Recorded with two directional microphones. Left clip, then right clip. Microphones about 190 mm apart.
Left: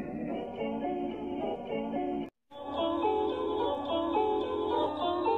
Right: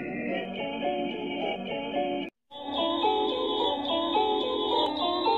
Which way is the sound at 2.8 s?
30° right (ahead or behind).